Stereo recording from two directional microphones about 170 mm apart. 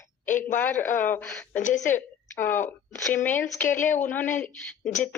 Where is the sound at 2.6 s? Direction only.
10° left (ahead or behind).